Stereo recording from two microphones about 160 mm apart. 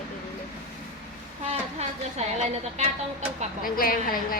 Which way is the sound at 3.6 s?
65° left (ahead or behind).